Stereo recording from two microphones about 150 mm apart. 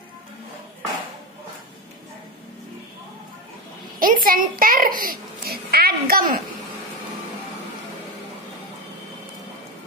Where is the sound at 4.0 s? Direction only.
70° right (ahead or behind).